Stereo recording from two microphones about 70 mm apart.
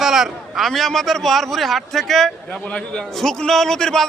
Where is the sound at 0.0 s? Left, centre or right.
Centre.